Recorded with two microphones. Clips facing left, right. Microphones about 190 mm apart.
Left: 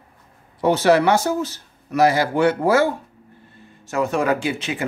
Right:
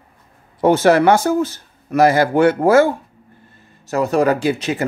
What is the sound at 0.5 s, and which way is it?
Speech, 50° right (ahead or behind).